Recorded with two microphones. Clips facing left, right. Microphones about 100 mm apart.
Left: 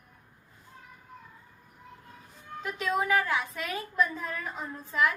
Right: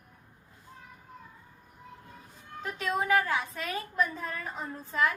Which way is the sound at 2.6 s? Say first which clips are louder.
Left 2 dB; 35° right (ahead or behind).